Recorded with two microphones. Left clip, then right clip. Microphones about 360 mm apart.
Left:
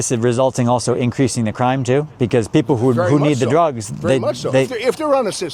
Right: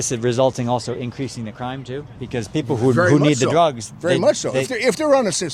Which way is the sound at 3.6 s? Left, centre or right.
Left.